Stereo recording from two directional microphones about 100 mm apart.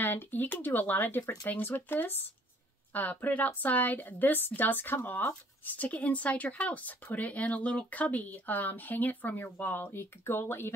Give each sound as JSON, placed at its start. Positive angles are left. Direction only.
{"t": 0.0, "sound": "speech", "side_deg": 20}